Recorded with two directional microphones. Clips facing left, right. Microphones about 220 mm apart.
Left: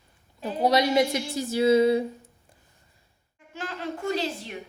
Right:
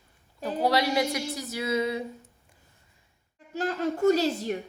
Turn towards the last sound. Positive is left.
turn(degrees=-45)  # may be behind; listen again after turning